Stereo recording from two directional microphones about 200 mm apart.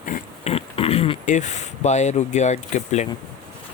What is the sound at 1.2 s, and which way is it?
Speech, 35° left (ahead or behind).